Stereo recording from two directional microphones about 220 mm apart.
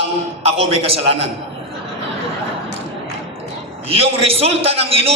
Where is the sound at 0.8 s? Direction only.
25° right (ahead or behind).